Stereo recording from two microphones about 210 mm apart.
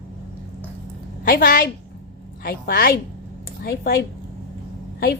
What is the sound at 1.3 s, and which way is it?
A woman's voice, 45° left (ahead or behind).